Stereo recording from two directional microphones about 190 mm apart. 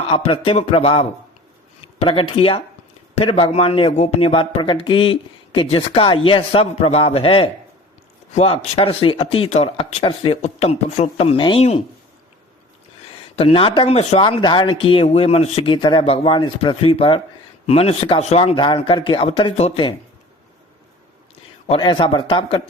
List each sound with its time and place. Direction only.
0.1 s a man's voice: 30° left (ahead or behind)
13.3 s speech: 30° left (ahead or behind)
21.7 s speech: 25° left (ahead or behind)